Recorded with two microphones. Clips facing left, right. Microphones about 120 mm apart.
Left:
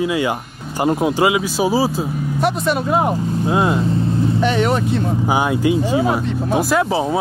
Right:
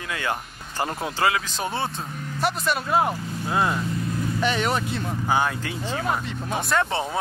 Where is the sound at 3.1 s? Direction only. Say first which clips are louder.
Left 9 dB; 20° left (ahead or behind); by 7.2 s 5° left (ahead or behind).